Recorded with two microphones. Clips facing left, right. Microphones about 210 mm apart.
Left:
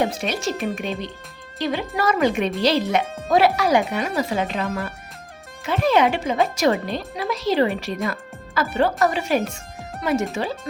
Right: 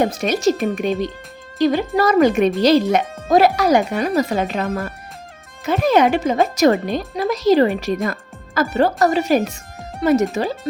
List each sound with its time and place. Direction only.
0.0 s a child's voice: 45° right (ahead or behind)
8.0 s music: 45° right (ahead or behind)
8.7 s speech: 40° right (ahead or behind)